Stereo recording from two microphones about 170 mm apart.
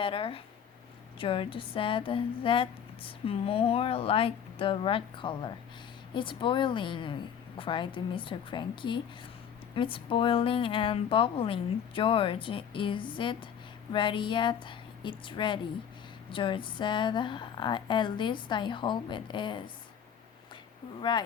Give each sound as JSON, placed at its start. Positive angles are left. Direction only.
{"t": 0.0, "sound": "a woman's voice", "side_deg": 30}
{"t": 21.0, "sound": "a woman's voice", "side_deg": 25}